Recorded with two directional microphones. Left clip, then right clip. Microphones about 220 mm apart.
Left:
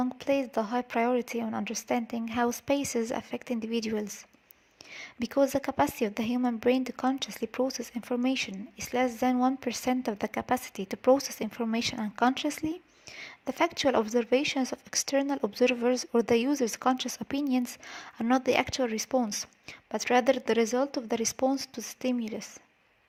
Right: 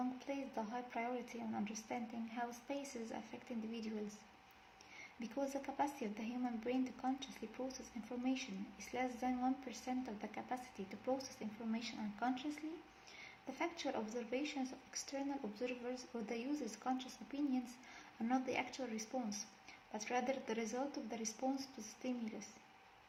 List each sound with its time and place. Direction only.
0.3 s speech: 50° left (ahead or behind)
4.9 s speech: 50° left (ahead or behind)
13.6 s speech: 50° left (ahead or behind)